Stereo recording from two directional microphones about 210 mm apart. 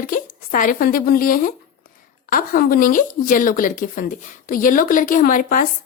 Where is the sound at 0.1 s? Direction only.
40° left (ahead or behind).